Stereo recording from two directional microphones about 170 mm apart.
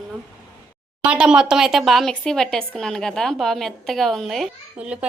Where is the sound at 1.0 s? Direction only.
5° right (ahead or behind).